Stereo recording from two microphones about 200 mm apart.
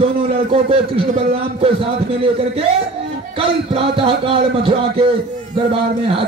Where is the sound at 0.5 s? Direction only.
30° right (ahead or behind).